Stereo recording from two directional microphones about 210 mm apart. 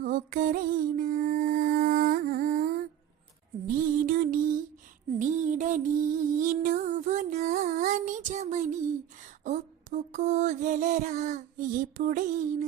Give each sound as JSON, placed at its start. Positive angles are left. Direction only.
{"t": 0.0, "sound": "music", "side_deg": -40}
{"t": 9.4, "sound": "mantra", "side_deg": -35}
{"t": 11.9, "sound": "a sound", "side_deg": -40}